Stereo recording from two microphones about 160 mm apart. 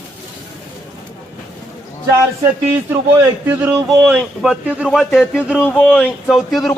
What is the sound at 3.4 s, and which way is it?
A man's voice, 10° right (ahead or behind).